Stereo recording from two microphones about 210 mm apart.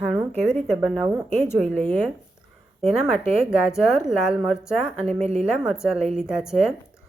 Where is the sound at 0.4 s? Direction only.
5° right (ahead or behind).